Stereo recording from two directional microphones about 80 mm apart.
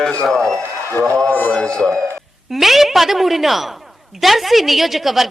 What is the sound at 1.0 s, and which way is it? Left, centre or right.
Speech, right.